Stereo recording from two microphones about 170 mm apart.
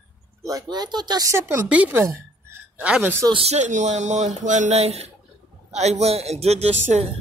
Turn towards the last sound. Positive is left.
turn(degrees=-40)  # may be behind; listen again after turning